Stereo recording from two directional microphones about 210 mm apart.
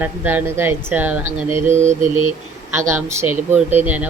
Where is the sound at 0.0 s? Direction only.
10° right (ahead or behind).